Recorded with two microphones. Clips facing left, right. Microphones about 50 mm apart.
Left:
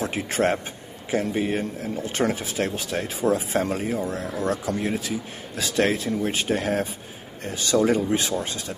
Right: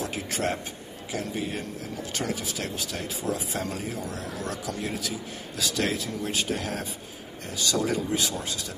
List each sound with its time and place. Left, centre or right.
0.0 s a man's voice: left